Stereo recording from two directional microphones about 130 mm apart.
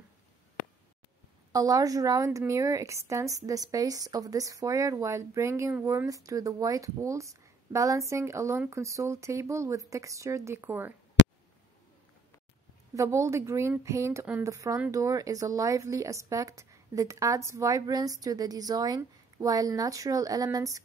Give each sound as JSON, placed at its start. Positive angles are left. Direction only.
{"t": 1.5, "sound": "a woman's voice", "side_deg": -30}
{"t": 12.9, "sound": "a woman's voice", "side_deg": -25}